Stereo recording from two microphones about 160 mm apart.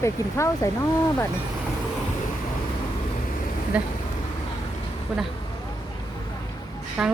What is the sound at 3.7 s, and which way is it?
Speech, 10° right (ahead or behind).